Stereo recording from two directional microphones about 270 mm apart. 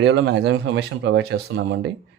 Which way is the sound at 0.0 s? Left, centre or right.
Right.